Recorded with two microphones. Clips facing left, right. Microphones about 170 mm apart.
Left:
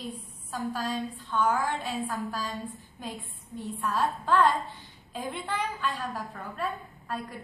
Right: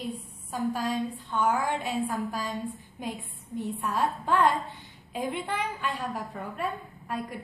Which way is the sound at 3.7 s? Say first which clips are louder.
Left 1 dB; 15° right (ahead or behind).